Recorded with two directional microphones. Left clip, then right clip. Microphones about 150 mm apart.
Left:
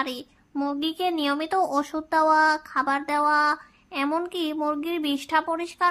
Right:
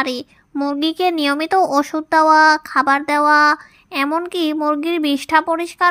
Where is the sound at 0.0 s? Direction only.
35° right (ahead or behind).